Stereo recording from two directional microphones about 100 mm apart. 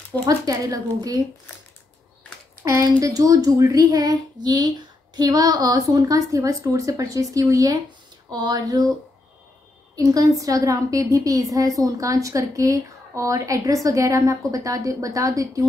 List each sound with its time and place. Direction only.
0.2 s a woman's voice: 35° right (ahead or behind)
3.0 s a woman's voice: 35° right (ahead or behind)
9.9 s a woman's voice: 35° right (ahead or behind)